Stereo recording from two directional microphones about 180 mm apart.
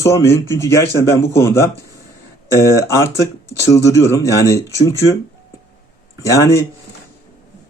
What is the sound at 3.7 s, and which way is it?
Speech, 15° left (ahead or behind).